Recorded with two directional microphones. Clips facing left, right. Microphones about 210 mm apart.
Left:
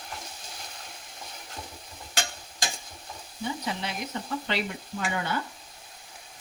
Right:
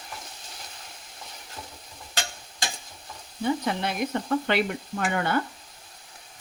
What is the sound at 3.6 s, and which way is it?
Speech, 55° right (ahead or behind).